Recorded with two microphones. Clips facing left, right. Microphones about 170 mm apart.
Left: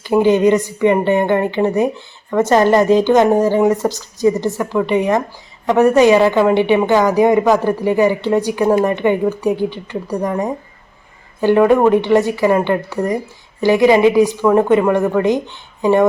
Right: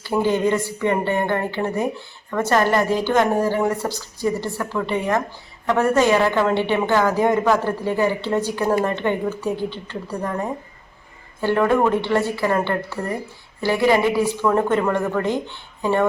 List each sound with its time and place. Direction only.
0.0 s a woman's voice: 15° left (ahead or behind)